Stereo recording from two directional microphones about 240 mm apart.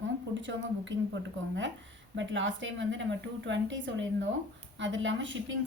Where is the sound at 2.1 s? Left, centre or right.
Right.